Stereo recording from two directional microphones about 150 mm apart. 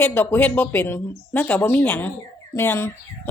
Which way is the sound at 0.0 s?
15° left (ahead or behind).